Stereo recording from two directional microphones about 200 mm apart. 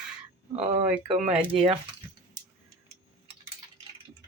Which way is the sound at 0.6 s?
30° right (ahead or behind).